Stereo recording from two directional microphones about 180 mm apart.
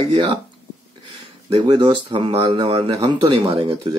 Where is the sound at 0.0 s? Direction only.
25° right (ahead or behind).